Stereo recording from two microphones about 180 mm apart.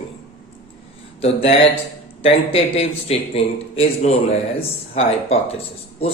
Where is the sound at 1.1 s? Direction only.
35° left (ahead or behind).